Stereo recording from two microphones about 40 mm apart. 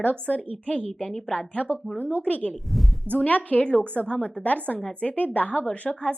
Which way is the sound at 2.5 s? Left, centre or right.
Centre.